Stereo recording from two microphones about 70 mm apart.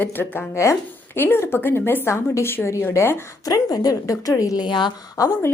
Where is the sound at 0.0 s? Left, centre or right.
Left.